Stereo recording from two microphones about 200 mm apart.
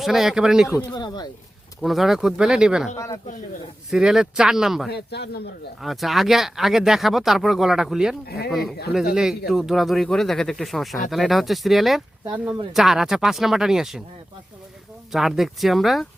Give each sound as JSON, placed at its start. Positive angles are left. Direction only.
{"t": 0.0, "sound": "speech", "side_deg": 0}
{"t": 0.7, "sound": "speech", "side_deg": 20}
{"t": 1.8, "sound": "speech", "side_deg": 0}
{"t": 2.9, "sound": "speech", "side_deg": 15}
{"t": 3.9, "sound": "speech", "side_deg": -5}
{"t": 4.9, "sound": "a man's voice", "side_deg": 55}
{"t": 5.8, "sound": "speech", "side_deg": 0}
{"t": 15.1, "sound": "speech", "side_deg": 0}